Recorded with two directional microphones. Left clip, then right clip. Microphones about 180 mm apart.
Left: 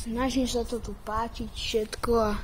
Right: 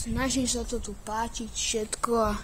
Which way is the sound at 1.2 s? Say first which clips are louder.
Even; 35° right (ahead or behind).